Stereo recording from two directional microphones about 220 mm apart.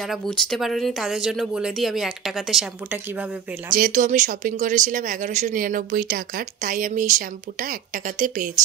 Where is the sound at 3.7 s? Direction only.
40° right (ahead or behind).